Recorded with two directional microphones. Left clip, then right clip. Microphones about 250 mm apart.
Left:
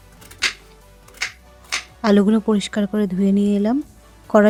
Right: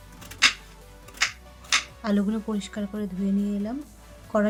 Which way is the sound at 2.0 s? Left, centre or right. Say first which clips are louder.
Left 11 dB; left.